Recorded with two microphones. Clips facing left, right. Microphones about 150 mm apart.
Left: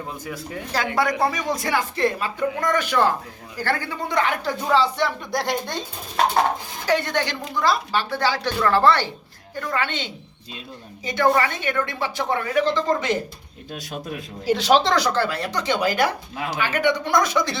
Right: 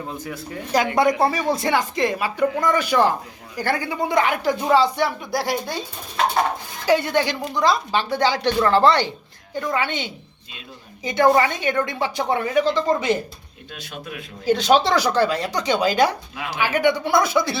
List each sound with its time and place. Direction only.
0.7 s speech: 20° right (ahead or behind)
6.8 s speech: 10° right (ahead or behind)
13.7 s a man's voice: 40° left (ahead or behind)
14.4 s speech: centre (ahead or behind)